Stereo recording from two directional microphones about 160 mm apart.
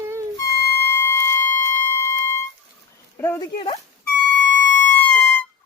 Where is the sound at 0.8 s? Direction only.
15° left (ahead or behind).